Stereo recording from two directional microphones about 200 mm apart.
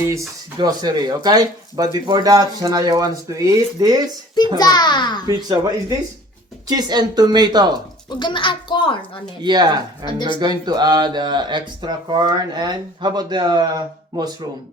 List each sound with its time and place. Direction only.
0.1 s speech: 20° right (ahead or behind)
4.5 s a child's voice: 20° left (ahead or behind)
5.2 s speech: 20° right (ahead or behind)
6.7 s speech: 20° right (ahead or behind)
8.1 s a child's voice: 25° left (ahead or behind)
9.4 s speech: 20° right (ahead or behind)
10.1 s a child's voice: 25° left (ahead or behind)
10.7 s speech: 20° right (ahead or behind)